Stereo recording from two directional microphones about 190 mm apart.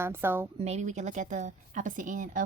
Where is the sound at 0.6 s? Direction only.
35° right (ahead or behind).